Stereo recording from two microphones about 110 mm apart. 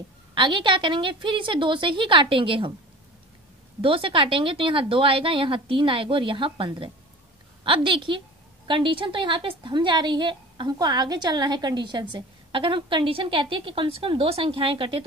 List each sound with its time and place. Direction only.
0.3 s a woman's voice: 45° right (ahead or behind)
3.8 s a woman's voice: 55° right (ahead or behind)